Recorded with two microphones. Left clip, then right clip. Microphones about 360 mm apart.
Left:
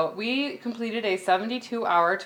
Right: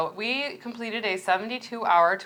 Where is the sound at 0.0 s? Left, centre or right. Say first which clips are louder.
Left 1 dB; right.